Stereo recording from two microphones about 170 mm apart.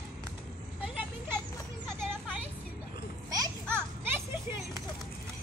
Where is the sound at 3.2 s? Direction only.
20° right (ahead or behind).